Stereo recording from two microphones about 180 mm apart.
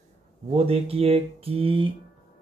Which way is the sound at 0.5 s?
35° right (ahead or behind).